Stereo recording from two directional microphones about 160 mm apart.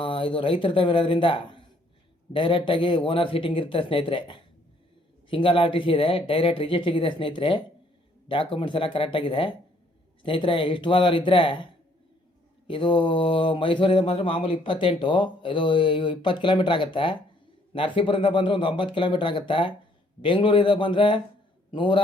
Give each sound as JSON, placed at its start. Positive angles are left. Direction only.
{"t": 0.0, "sound": "mantra", "side_deg": 35}